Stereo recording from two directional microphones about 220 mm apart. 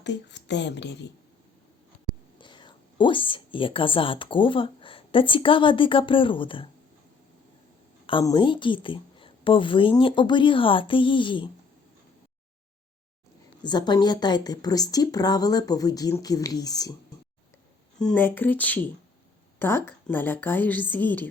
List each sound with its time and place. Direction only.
0.0 s speech: 55° left (ahead or behind)
2.4 s a woman's voice: 20° left (ahead or behind)
8.0 s a woman's voice: 20° left (ahead or behind)
13.6 s speech: 20° left (ahead or behind)
18.0 s speech: 5° left (ahead or behind)